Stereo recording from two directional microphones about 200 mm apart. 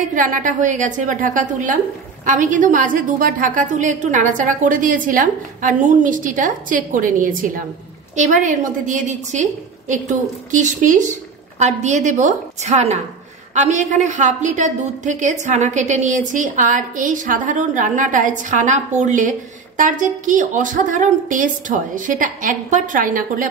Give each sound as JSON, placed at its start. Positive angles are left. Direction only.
{"t": 0.1, "sound": "a woman's voice", "side_deg": -40}